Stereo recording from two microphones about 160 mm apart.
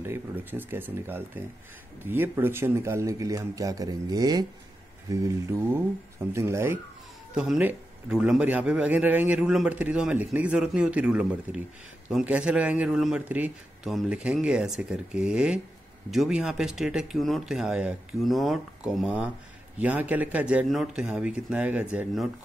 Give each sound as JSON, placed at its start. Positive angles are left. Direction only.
{"t": 0.0, "sound": "a man's voice", "side_deg": -15}
{"t": 7.3, "sound": "a man's voice", "side_deg": -5}